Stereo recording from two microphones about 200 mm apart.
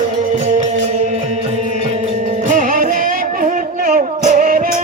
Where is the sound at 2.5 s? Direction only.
45° right (ahead or behind).